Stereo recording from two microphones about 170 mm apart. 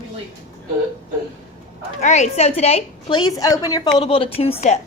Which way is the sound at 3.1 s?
25° left (ahead or behind).